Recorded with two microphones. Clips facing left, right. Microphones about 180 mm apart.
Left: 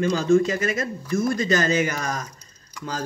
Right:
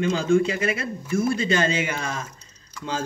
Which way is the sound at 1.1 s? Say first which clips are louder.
Even; 30° right (ahead or behind).